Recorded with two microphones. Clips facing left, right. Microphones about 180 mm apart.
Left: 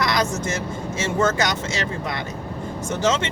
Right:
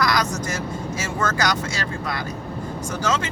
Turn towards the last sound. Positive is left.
turn(degrees=25)  # may be behind; listen again after turning